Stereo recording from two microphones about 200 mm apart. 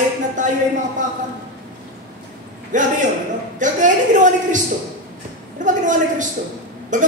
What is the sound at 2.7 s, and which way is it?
A woman's voice, 40° right (ahead or behind).